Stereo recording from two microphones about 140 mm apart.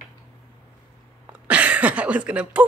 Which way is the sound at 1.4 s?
10° right (ahead or behind).